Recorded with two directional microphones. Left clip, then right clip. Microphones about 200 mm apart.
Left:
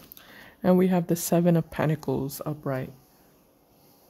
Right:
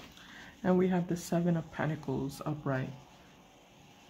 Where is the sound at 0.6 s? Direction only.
55° left (ahead or behind).